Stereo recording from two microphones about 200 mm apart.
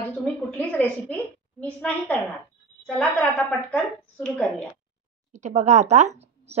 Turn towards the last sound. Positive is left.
turn(degrees=-30)  # may be behind; listen again after turning